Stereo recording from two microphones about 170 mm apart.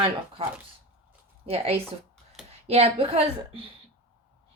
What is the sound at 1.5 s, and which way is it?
A woman's voice, 35° right (ahead or behind).